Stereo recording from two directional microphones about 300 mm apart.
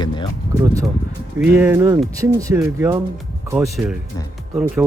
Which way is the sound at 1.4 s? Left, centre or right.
Centre.